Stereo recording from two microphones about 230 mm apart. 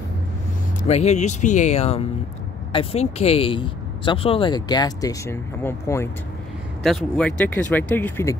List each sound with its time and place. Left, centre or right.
0.8 s speech: left; by 8.4 s centre